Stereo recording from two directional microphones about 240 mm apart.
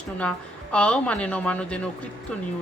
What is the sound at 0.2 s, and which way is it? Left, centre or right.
Speech, centre.